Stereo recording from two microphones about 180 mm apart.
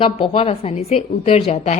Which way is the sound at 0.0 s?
35° left (ahead or behind).